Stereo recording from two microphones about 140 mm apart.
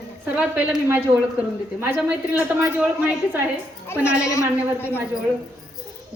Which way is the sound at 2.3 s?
10° right (ahead or behind).